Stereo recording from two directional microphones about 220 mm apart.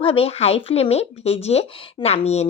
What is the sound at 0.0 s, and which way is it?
Speech, 25° left (ahead or behind).